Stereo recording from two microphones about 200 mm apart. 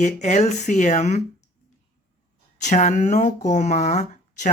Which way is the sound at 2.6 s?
35° left (ahead or behind).